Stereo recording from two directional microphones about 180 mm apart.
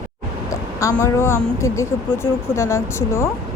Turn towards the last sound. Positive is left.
turn(degrees=15)  # may be behind; listen again after turning